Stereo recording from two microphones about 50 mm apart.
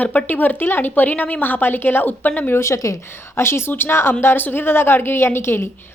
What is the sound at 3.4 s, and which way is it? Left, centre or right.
Speech, left.